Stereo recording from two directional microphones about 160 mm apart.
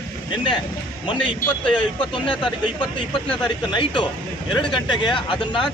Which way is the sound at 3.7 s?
30° left (ahead or behind).